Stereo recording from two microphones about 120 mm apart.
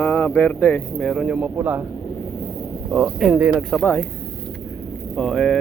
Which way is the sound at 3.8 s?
15° left (ahead or behind).